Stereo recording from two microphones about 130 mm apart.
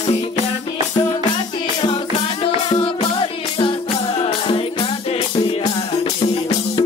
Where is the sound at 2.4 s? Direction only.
40° left (ahead or behind).